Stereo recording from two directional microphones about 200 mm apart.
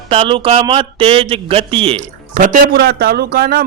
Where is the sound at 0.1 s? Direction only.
25° right (ahead or behind).